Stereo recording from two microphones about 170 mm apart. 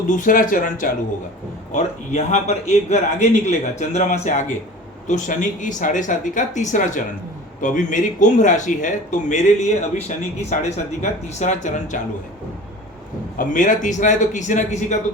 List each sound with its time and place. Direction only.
0.2 s a man's voice: 50° left (ahead or behind)
13.4 s a man's voice: 50° left (ahead or behind)